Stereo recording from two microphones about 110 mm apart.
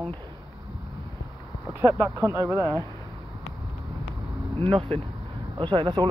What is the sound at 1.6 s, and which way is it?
Speech, 20° right (ahead or behind).